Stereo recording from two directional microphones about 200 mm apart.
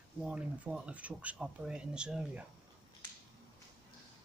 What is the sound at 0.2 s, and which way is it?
Speech, 5° right (ahead or behind).